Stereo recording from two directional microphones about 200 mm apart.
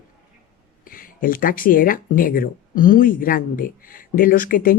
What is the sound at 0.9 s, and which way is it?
Speech, 45° left (ahead or behind).